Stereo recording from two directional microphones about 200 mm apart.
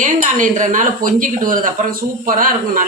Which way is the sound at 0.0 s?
40° right (ahead or behind).